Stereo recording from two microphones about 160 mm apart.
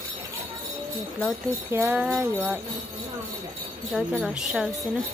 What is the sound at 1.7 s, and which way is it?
Jingle bell, 15° right (ahead or behind).